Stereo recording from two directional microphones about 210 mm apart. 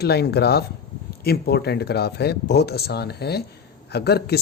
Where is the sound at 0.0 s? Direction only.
50° left (ahead or behind).